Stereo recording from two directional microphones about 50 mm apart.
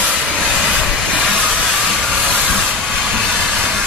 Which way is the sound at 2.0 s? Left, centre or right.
Right.